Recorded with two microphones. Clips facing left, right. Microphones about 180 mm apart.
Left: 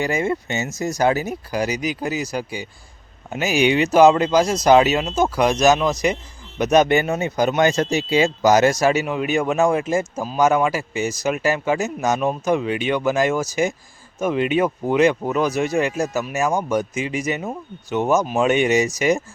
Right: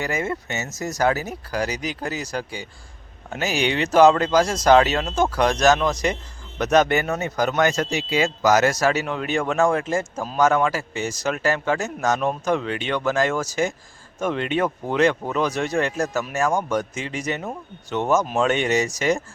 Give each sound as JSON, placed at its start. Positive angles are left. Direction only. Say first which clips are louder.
{"t": 0.0, "sound": "speech", "louder": "left 4 dB", "side_deg": 25}
{"t": 0.6, "sound": "speech", "louder": "left 2 dB", "side_deg": 15}
{"t": 7.8, "sound": "speech", "louder": "left 4 dB", "side_deg": 30}